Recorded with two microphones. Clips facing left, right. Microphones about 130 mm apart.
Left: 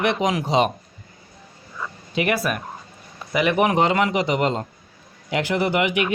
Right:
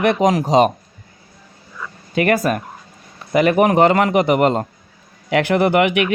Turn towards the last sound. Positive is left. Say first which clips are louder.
# right 6 dB
turn(degrees=-60)  # may be behind; listen again after turning